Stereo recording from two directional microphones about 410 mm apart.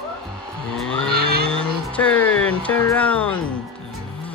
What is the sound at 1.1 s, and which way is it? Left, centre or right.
Vehicle, right.